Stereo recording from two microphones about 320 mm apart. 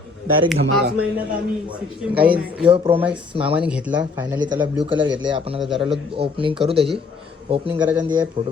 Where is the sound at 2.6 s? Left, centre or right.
Centre.